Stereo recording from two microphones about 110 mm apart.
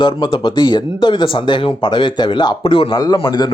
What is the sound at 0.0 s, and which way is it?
Speech, 45° left (ahead or behind).